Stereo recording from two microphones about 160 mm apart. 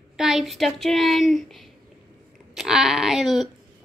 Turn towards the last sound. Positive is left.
turn(degrees=0)  # may be behind; listen again after turning